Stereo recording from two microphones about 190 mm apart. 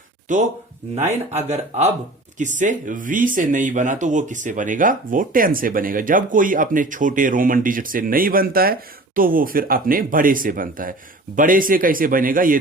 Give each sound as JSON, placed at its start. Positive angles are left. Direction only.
{"t": 0.3, "sound": "speech", "side_deg": -40}